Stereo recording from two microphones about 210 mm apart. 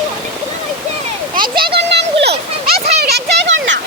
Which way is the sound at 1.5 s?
50° right (ahead or behind).